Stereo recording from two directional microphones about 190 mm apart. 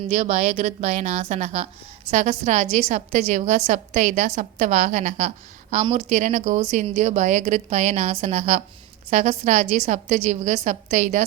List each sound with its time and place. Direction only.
0.1 s a woman's voice: 40° right (ahead or behind)